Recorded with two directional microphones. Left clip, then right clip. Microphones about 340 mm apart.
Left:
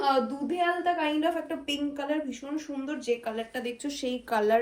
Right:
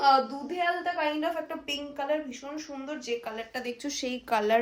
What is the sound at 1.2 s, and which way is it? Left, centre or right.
A woman's voice, centre.